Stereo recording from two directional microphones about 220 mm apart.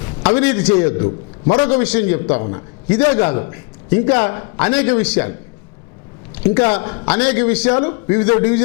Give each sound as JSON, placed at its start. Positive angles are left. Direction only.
{"t": 0.3, "sound": "a man's voice", "side_deg": 10}
{"t": 1.0, "sound": "a man's voice", "side_deg": 25}
{"t": 1.6, "sound": "a man's voice", "side_deg": 10}